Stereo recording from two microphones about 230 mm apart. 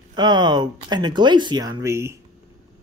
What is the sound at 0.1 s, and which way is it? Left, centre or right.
Speech, centre.